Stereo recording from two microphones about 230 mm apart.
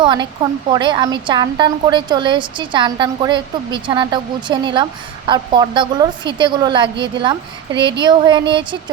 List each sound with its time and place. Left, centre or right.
0.0 s a woman's voice: centre